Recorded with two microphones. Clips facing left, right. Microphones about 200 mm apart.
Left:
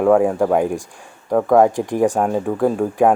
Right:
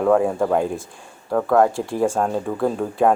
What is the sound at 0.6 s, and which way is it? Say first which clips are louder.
Speech: left 3 dB; 15° left (ahead or behind).